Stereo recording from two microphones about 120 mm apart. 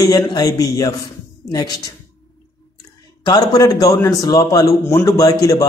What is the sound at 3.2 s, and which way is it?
Speech, 35° left (ahead or behind).